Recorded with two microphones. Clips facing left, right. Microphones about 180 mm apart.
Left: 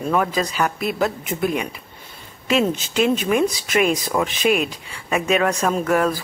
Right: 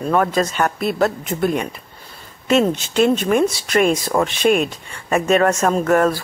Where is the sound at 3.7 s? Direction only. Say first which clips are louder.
Right 3 dB; 40° right (ahead or behind).